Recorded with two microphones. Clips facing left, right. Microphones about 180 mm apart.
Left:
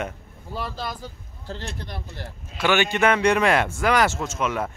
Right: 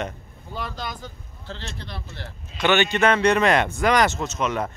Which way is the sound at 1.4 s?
45° left (ahead or behind).